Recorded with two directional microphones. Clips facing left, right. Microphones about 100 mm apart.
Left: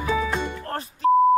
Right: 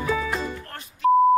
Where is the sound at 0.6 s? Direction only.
35° left (ahead or behind).